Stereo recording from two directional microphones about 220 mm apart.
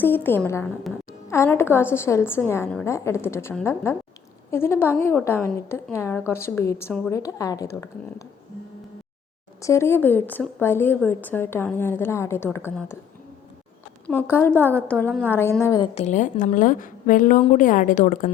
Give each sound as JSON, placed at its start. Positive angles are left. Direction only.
{"t": 0.0, "sound": "a woman's voice", "side_deg": 10}
{"t": 9.6, "sound": "a woman's voice", "side_deg": 15}
{"t": 14.1, "sound": "a woman's voice", "side_deg": 10}
{"t": 16.0, "sound": "a woman's voice", "side_deg": 35}